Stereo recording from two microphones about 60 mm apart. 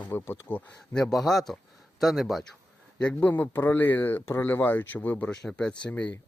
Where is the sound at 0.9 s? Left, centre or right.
Centre.